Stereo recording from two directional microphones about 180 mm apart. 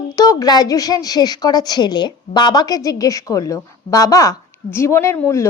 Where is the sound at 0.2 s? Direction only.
20° left (ahead or behind).